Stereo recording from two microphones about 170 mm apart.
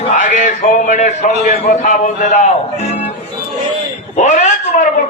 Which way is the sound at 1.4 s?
45° left (ahead or behind).